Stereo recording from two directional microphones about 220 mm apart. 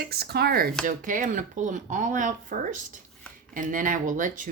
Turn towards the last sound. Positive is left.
turn(degrees=-35)  # may be behind; listen again after turning